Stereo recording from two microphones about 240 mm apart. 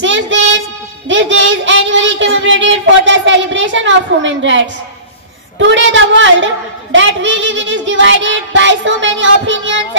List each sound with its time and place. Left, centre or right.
0.0 s child singing: right
5.6 s a woman's voice: right